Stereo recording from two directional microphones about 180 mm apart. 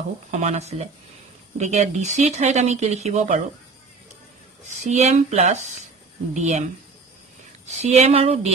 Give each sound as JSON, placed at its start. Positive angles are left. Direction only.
{"t": 0.3, "sound": "speech", "side_deg": -40}
{"t": 4.6, "sound": "speech", "side_deg": -40}
{"t": 7.6, "sound": "speech", "side_deg": -35}